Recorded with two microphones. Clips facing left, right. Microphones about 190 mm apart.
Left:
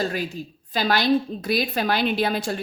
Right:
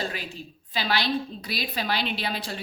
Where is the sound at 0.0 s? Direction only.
45° left (ahead or behind).